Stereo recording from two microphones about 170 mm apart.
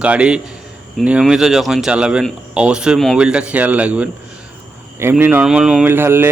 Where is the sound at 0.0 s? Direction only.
5° right (ahead or behind).